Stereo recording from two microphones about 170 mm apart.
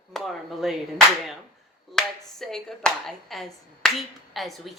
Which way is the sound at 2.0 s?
Centre (ahead or behind).